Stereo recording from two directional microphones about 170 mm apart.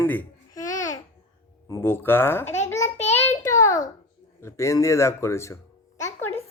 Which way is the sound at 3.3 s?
20° left (ahead or behind).